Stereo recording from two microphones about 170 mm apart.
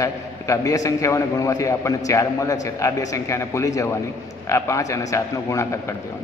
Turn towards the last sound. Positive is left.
turn(degrees=15)  # may be behind; listen again after turning